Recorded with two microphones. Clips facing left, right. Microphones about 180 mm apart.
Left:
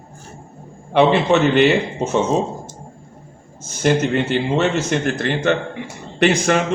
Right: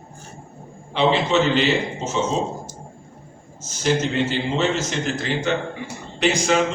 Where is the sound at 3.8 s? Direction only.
55° left (ahead or behind).